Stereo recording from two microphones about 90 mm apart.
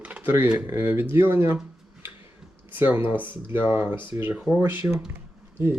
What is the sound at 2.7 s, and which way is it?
Speech, 25° right (ahead or behind).